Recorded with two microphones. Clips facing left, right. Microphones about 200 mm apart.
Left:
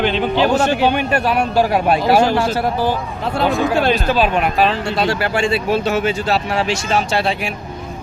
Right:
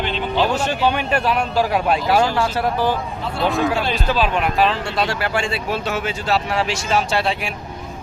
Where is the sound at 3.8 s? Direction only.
60° left (ahead or behind).